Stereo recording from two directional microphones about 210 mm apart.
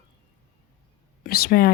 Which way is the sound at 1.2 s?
45° left (ahead or behind).